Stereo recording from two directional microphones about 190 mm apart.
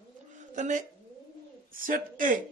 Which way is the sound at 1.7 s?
45° right (ahead or behind).